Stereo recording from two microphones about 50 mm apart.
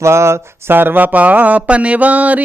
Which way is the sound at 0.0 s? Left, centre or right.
Right.